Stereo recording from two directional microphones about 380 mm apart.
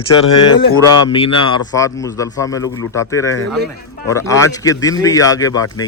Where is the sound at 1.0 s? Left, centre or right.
Centre.